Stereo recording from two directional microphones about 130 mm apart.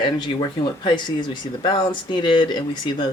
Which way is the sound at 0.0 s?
35° left (ahead or behind).